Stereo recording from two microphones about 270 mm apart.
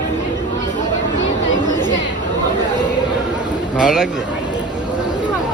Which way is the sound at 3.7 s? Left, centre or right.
Centre.